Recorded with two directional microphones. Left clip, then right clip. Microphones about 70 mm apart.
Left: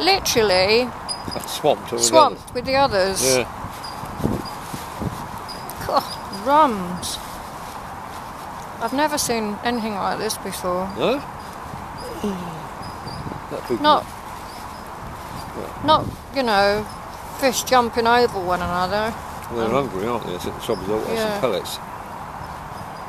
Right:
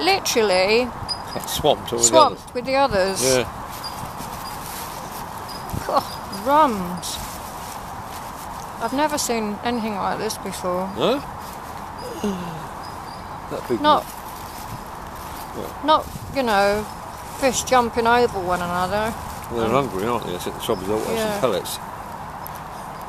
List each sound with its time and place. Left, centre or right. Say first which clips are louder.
0.0 s speech: left 1 dB; centre
1.3 s speech: even; right
2.0 s speech: left 1 dB; centre
5.9 s speech: left 1 dB; centre
8.8 s speech: left 1 dB; centre
11.0 s speech: right 1 dB; right
13.7 s speech: even; right
15.8 s speech: left 1 dB; centre
19.7 s speech: right 2 dB; right
21.1 s speech: left 1 dB; centre
21.4 s speech: right 1 dB; right